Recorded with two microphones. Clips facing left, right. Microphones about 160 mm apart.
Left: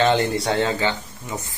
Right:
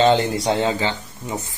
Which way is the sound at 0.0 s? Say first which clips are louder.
Right 2 dB; 20° right (ahead or behind).